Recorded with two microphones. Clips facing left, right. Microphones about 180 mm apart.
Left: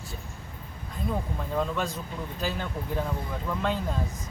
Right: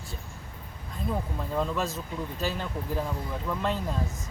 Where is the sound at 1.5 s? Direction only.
Centre (ahead or behind).